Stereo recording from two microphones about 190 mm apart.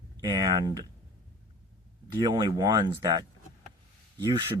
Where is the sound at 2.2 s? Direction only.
20° right (ahead or behind).